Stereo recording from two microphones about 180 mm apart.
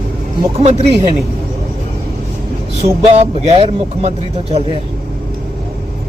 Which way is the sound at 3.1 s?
35° right (ahead or behind).